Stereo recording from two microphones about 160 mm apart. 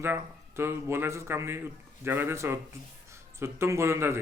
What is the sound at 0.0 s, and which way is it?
A man's voice, 15° right (ahead or behind).